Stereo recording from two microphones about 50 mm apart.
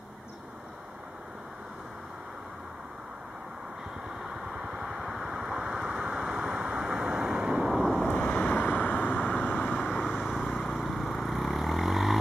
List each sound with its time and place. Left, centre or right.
4.2 s vehicle: centre
7.5 s vehicle: centre
8.3 s vehicle: left
10.0 s vehicle: centre